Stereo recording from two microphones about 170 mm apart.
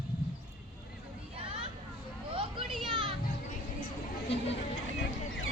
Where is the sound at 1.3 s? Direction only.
35° right (ahead or behind).